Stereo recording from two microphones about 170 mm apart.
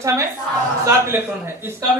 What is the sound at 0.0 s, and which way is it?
Speech, 15° right (ahead or behind).